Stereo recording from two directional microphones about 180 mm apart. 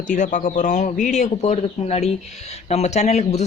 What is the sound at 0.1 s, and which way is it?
Speech, 45° left (ahead or behind).